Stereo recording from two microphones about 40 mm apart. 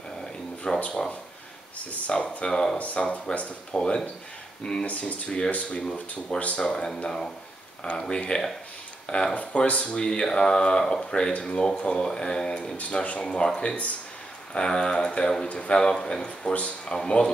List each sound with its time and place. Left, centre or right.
0.7 s speech: centre
1.9 s speech: left
2.8 s speech: left
8.0 s speech: left
14.5 s speech: left
15.4 s speech: left
15.7 s speech: centre